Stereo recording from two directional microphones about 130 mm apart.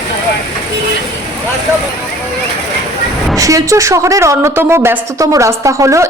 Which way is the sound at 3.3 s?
25° right (ahead or behind).